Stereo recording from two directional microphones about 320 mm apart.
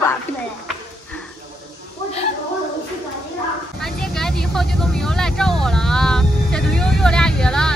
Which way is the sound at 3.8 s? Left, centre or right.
Centre.